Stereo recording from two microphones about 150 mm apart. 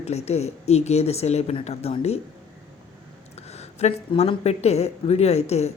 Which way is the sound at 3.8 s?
45° left (ahead or behind).